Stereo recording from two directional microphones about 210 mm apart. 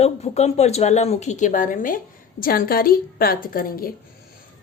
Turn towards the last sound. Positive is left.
turn(degrees=45)  # may be behind; listen again after turning